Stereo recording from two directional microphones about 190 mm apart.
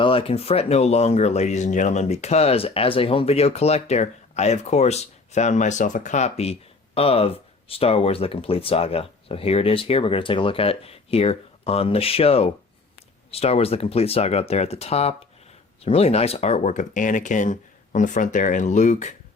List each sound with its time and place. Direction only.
0.0 s speech: 30° left (ahead or behind)